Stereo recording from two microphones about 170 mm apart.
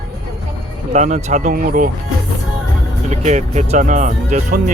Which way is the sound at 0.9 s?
40° right (ahead or behind).